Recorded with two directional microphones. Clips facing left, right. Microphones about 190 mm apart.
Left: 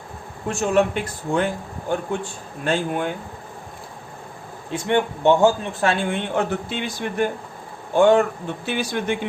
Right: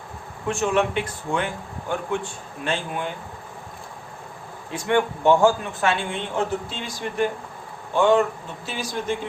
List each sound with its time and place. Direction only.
0.4 s a man's voice: 40° left (ahead or behind)
4.7 s a man's voice: 25° left (ahead or behind)
5.8 s speech: 35° left (ahead or behind)
6.1 s a man's voice: 60° left (ahead or behind)
8.6 s speech: 65° left (ahead or behind)